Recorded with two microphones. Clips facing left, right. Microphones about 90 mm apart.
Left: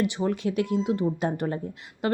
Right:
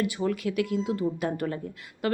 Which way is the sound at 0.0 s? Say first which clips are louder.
Left 2 dB; 25° left (ahead or behind).